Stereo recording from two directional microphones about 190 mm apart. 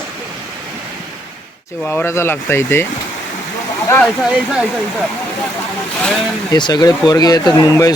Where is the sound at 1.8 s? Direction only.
10° left (ahead or behind).